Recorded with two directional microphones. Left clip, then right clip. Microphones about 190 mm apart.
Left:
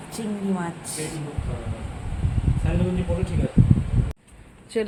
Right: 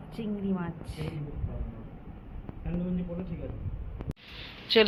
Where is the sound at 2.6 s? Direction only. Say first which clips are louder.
Left 9 dB; 45° left (ahead or behind).